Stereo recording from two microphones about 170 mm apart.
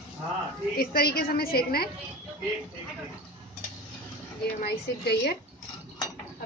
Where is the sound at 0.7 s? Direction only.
65° left (ahead or behind).